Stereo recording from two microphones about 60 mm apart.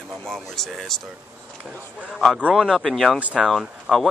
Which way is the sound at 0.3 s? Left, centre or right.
Centre.